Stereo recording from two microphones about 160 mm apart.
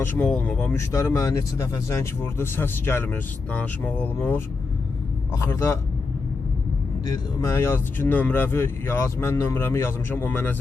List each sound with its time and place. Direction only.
0.0 s speech: 10° left (ahead or behind)
7.1 s speech: 15° left (ahead or behind)